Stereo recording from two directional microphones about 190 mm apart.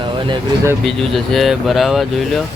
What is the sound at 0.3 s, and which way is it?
Speech, 15° right (ahead or behind).